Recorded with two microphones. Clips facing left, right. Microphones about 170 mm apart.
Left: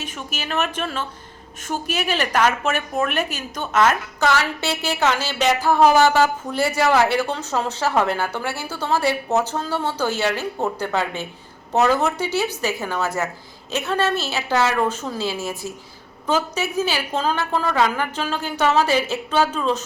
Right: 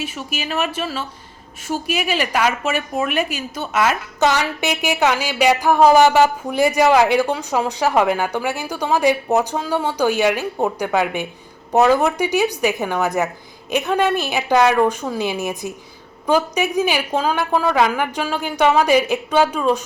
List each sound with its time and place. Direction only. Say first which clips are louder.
0.0 s a woman's voice: right 4 dB; 10° right (ahead or behind)